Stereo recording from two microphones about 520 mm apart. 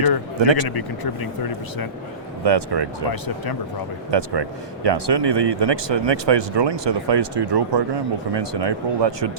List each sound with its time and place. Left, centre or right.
0.3 s a man's voice: right
0.7 s speech: left
2.4 s speech: right
3.1 s speech: left
4.1 s speech: right